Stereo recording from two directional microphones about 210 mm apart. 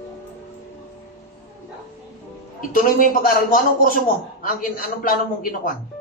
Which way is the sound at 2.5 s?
40° left (ahead or behind).